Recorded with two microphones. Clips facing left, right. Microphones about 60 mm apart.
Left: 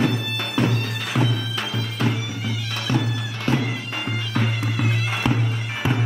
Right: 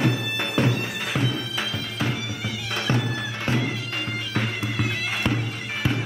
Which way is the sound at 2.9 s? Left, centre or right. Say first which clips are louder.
Left 2 dB; right.